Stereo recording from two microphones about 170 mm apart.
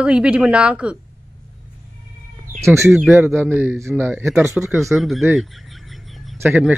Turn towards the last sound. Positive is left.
turn(degrees=-10)  # may be behind; listen again after turning